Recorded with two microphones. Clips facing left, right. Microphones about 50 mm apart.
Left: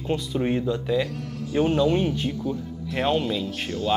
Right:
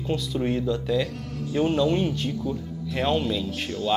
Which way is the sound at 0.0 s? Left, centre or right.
Centre.